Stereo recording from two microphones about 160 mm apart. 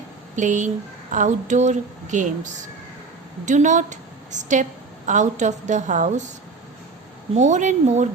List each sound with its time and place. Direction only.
0.3 s a woman's voice: 50° right (ahead or behind)
7.3 s a woman's voice: 50° right (ahead or behind)